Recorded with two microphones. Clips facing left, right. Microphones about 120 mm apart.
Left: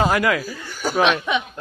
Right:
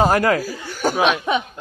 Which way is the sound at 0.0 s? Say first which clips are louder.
Right 3 dB; 40° right (ahead or behind).